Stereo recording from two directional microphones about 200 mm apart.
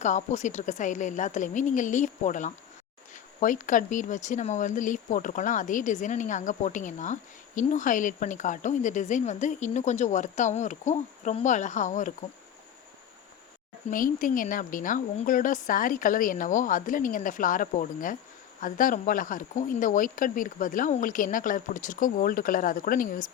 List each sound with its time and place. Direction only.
0.0 s speech: 35° left (ahead or behind)
13.9 s speech: 45° left (ahead or behind)